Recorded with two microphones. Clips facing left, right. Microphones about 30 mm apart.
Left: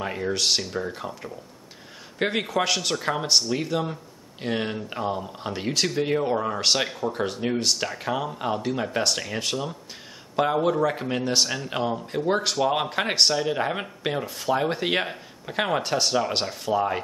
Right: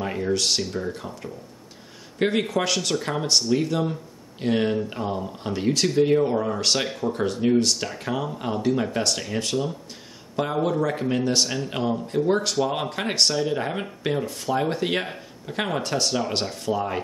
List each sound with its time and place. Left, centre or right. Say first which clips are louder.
0.0 s speech: right 1 dB; centre